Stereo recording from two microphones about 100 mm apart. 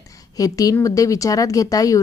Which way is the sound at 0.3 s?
35° left (ahead or behind).